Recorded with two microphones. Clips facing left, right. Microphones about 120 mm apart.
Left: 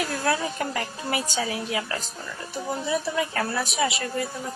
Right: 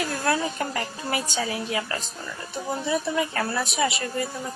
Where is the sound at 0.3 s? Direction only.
Centre (ahead or behind).